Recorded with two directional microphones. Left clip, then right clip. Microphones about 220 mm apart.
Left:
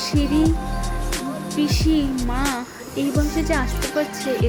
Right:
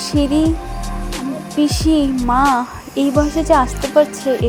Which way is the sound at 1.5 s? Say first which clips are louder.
Right 6 dB; 20° right (ahead or behind).